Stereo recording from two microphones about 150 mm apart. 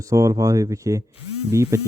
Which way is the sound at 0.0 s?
20° right (ahead or behind).